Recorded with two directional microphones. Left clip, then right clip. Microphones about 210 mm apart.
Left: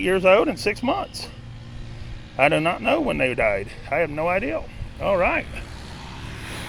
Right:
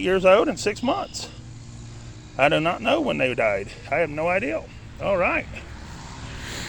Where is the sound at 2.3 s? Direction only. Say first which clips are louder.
Left 1 dB; centre (ahead or behind).